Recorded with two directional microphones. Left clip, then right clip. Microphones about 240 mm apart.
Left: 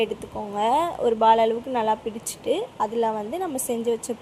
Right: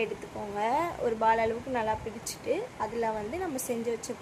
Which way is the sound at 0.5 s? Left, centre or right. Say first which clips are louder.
Left 7 dB; centre.